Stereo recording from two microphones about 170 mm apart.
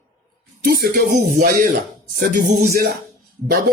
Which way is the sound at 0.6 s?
60° right (ahead or behind).